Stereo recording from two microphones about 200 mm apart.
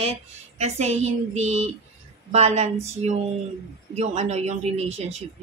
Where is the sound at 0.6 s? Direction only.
35° right (ahead or behind).